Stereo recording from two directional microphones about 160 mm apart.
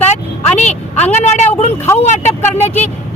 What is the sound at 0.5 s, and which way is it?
Speech, 45° left (ahead or behind).